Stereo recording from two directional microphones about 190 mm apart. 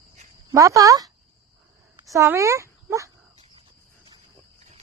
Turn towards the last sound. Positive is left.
turn(degrees=-15)  # may be behind; listen again after turning